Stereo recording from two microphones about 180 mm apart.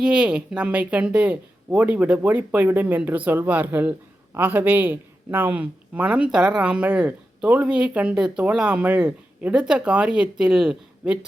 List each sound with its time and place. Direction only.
0.0 s speech: 5° right (ahead or behind)